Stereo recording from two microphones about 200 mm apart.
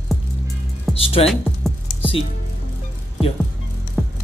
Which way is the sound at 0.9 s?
30° left (ahead or behind).